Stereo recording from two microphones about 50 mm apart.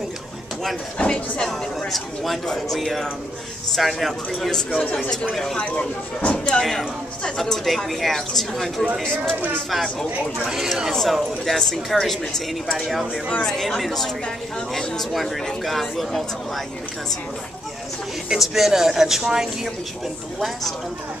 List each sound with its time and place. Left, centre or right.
0.9 s speech: left
1.4 s speech: centre
4.6 s a man's voice: left
5.3 s speech: centre
5.6 s speech: left; by 8.8 s centre
9.0 s speech: centre
9.7 s speech: centre
12.7 s speech: centre
18.3 s speech: centre